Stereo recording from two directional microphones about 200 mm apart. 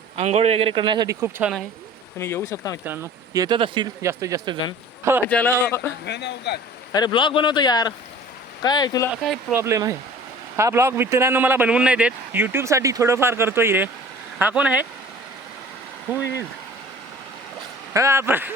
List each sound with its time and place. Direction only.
0.2 s speech: 30° right (ahead or behind)
1.2 s speech: 5° right (ahead or behind)
2.1 s speech: 15° left (ahead or behind)
2.8 s a man's voice: 10° right (ahead or behind)
5.3 s speech: 10° left (ahead or behind)
6.1 s speech: 60° left (ahead or behind)
6.9 s a man's voice: 20° left (ahead or behind)
9.6 s a man's voice: 15° right (ahead or behind)
17.9 s a man's voice: 15° right (ahead or behind)